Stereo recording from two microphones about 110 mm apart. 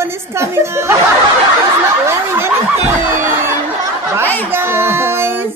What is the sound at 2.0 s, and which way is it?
Speech, 25° right (ahead or behind).